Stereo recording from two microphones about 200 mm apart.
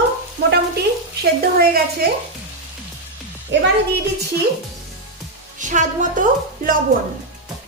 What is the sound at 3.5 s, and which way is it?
Speech, 60° right (ahead or behind).